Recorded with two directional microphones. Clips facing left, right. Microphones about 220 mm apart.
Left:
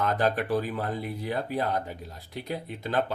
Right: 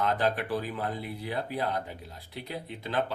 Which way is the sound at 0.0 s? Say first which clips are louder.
Left 2 dB; 45° left (ahead or behind).